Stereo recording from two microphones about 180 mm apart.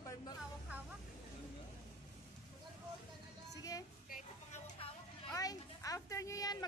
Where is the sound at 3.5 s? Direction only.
20° left (ahead or behind).